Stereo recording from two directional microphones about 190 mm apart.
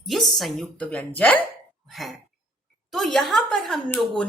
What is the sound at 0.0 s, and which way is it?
A woman's voice, centre (ahead or behind).